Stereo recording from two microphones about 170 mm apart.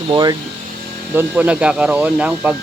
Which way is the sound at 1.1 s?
10° right (ahead or behind).